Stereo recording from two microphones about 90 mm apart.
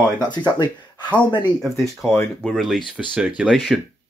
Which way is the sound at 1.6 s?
5° right (ahead or behind).